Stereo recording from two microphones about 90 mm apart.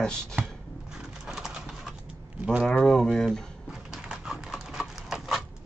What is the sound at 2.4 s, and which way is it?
Speech, 10° right (ahead or behind).